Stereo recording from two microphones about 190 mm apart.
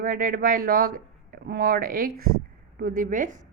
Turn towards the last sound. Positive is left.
turn(degrees=-45)  # may be behind; listen again after turning